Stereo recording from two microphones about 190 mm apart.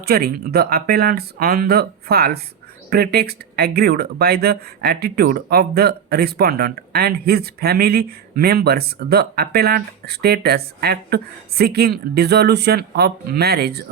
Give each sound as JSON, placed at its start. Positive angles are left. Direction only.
{"t": 0.0, "sound": "speech", "side_deg": -55}